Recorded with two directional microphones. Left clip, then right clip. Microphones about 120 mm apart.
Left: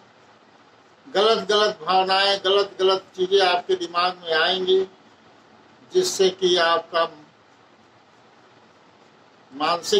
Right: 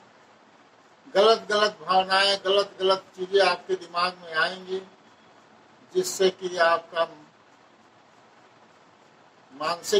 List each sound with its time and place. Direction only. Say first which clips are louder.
1.1 s speech: left 1 dB; 35° left (ahead or behind)
5.9 s speech: left 4 dB; 35° left (ahead or behind)
9.6 s speech: left 6 dB; 35° left (ahead or behind)